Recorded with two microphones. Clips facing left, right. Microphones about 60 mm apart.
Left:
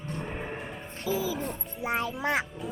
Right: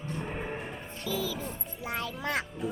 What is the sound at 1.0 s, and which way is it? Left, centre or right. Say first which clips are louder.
Music: left 4 dB; centre.